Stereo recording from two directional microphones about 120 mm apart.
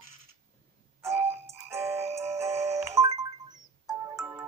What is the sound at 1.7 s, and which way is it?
Music, 20° right (ahead or behind).